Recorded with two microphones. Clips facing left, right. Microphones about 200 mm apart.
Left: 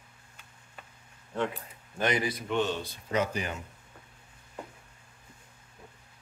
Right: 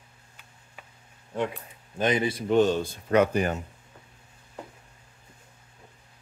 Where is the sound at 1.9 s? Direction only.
20° right (ahead or behind).